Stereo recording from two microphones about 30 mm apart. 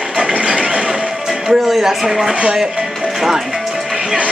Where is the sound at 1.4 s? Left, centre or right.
Centre.